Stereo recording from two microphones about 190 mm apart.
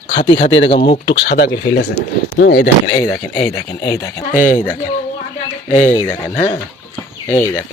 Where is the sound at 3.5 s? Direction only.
20° left (ahead or behind).